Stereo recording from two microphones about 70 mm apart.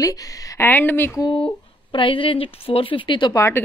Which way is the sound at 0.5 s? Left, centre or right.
Left.